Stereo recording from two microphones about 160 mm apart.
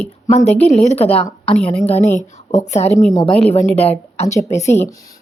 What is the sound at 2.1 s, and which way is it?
A woman's voice, 45° left (ahead or behind).